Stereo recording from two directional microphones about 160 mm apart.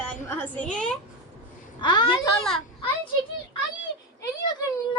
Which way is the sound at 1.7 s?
25° left (ahead or behind).